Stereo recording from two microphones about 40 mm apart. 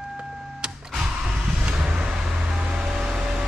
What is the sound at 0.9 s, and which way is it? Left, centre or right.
Vehicle, centre.